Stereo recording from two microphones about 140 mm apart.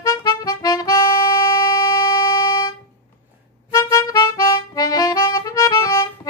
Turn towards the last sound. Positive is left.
turn(degrees=25)  # may be behind; listen again after turning